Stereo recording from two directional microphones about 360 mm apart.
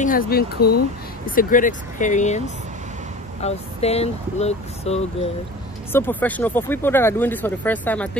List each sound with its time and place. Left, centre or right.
0.0 s speech: left
3.4 s speech: centre
5.9 s speech: centre